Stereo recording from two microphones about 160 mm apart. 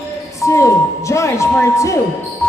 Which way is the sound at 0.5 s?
20° left (ahead or behind).